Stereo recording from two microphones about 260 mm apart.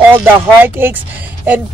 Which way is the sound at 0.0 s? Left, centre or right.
Centre.